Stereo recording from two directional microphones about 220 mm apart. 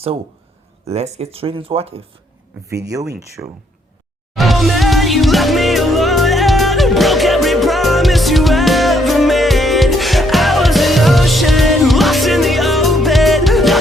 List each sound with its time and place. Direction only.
0.9 s speech: 30° right (ahead or behind)
2.6 s speech: 15° right (ahead or behind)
4.4 s music: centre (ahead or behind)